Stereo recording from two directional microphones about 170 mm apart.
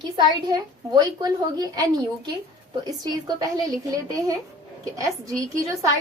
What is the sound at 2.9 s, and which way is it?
A woman's voice, 20° right (ahead or behind).